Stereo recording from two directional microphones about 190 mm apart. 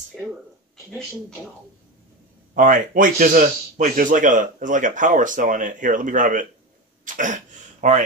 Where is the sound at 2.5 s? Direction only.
45° right (ahead or behind).